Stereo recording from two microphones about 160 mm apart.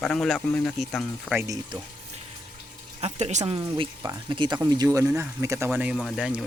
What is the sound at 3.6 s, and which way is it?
Speech, 30° right (ahead or behind).